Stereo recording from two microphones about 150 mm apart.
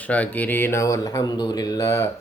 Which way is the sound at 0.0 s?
10° left (ahead or behind).